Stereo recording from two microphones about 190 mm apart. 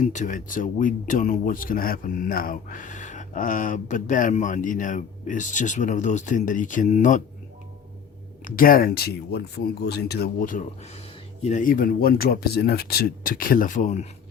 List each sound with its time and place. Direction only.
0.0 s speech: 40° left (ahead or behind)
8.4 s speech: 50° left (ahead or behind)